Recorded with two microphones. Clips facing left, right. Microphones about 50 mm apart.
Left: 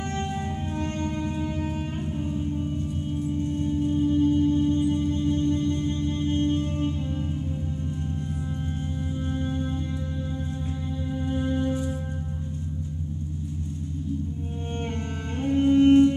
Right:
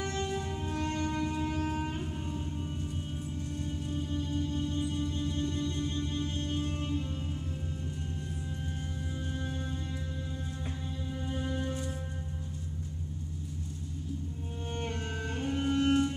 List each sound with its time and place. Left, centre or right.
0.0 s music: left
1.3 s music: centre
3.4 s music: left
11.2 s music: left
14.7 s music: left